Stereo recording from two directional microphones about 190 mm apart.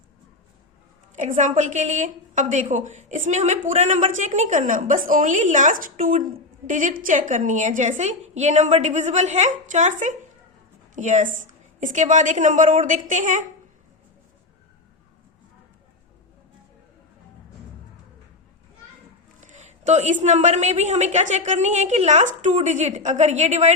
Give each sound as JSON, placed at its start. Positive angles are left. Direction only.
{"t": 1.1, "sound": "a woman's voice", "side_deg": -40}
{"t": 19.4, "sound": "a woman's voice", "side_deg": -40}